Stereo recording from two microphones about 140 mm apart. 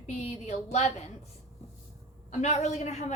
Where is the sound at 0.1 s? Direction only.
50° left (ahead or behind).